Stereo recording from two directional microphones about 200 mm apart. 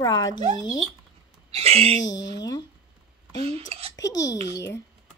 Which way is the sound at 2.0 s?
65° left (ahead or behind).